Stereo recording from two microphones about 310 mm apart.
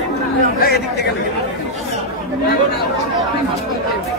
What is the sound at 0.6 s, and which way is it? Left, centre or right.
Speech, left.